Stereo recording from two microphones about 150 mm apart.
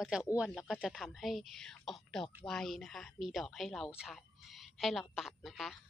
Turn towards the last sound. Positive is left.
turn(degrees=0)  # may be behind; listen again after turning